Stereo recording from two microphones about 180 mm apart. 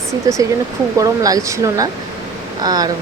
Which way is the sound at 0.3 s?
20° right (ahead or behind).